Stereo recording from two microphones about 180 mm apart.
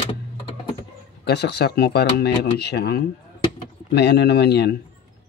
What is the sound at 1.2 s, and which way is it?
Speech, 65° left (ahead or behind).